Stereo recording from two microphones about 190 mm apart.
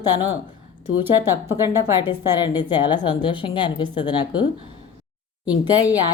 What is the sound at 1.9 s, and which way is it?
A woman's voice, 20° left (ahead or behind).